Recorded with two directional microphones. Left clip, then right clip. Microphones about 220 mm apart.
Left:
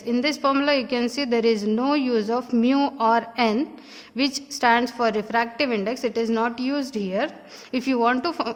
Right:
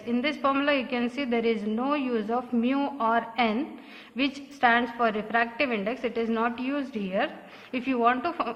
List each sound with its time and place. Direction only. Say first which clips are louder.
0.1 s a woman's voice: left 4 dB; 45° left (ahead or behind)